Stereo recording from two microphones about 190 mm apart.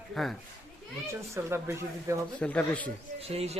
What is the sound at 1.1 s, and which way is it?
A woman's voice, 15° right (ahead or behind).